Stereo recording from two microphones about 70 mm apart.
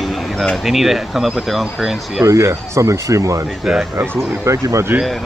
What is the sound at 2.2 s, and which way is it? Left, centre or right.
Speech, right.